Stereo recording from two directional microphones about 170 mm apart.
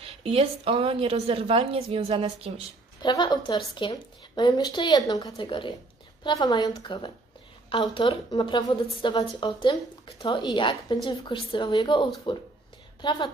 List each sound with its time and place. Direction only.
0.0 s a woman's voice: 35° right (ahead or behind)
3.0 s a woman's voice: 25° left (ahead or behind)